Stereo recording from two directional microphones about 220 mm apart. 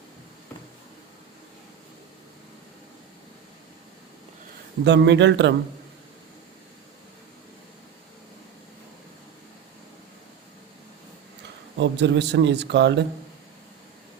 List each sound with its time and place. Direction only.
4.8 s a man's voice: 50° right (ahead or behind)
11.8 s a man's voice: 55° right (ahead or behind)